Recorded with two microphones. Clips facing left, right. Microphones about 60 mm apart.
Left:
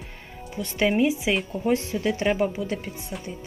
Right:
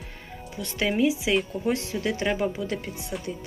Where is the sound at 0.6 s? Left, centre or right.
Centre.